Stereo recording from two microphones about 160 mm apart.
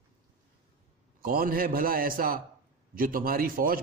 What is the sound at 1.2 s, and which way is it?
A man's voice, 65° right (ahead or behind).